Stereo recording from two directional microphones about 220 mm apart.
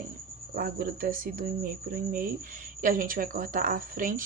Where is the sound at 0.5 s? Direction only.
40° right (ahead or behind).